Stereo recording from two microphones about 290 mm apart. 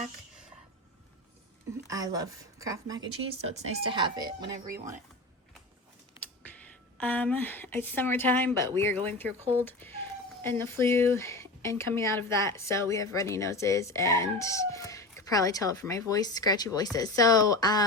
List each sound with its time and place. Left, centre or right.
1.9 s speech: centre
6.6 s a woman's voice: centre
10.4 s speech: centre